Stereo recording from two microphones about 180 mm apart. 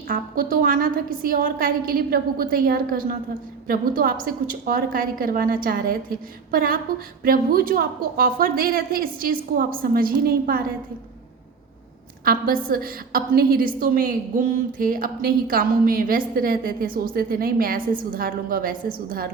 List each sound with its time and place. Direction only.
0.1 s a woman's voice: 50° right (ahead or behind)
12.2 s a woman's voice: 55° right (ahead or behind)